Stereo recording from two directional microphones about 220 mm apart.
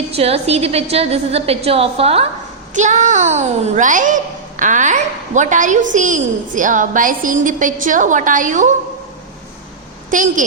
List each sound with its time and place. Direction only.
0.2 s a woman's voice: 30° right (ahead or behind)
10.1 s a child's voice: 35° right (ahead or behind)